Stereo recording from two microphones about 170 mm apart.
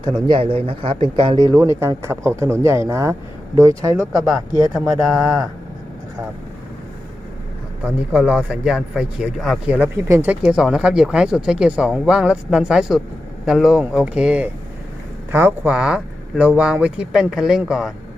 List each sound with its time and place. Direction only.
0.0 s speech: 25° right (ahead or behind)
4.9 s speech: centre (ahead or behind)
8.1 s speech: 5° right (ahead or behind)